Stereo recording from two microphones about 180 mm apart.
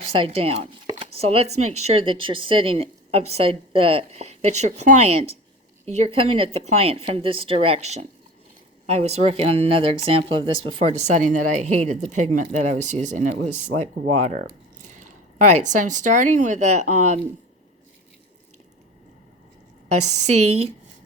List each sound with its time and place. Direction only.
0.1 s speech: 30° right (ahead or behind)
15.4 s speech: 45° right (ahead or behind)
19.9 s speech: 40° right (ahead or behind)